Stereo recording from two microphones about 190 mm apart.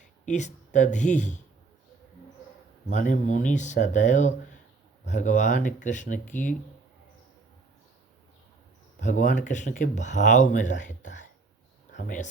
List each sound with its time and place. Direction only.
0.0 s speech: 40° left (ahead or behind)
2.9 s speech: 40° left (ahead or behind)
9.0 s speech: 40° left (ahead or behind)